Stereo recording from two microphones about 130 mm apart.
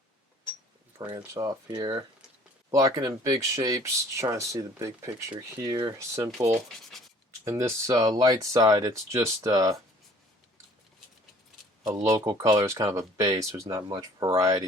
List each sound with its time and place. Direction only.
1.1 s speech: 25° right (ahead or behind)
11.8 s speech: 30° right (ahead or behind)